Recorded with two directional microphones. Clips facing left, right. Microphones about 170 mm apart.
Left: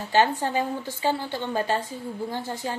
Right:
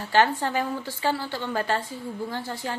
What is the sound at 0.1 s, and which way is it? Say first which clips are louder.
A woman's voice: even; 15° left (ahead or behind).